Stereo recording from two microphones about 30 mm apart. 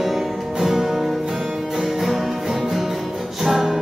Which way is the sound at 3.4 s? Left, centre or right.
Centre.